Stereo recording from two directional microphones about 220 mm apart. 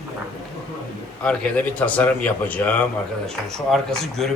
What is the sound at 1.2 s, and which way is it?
A man's voice, 5° left (ahead or behind).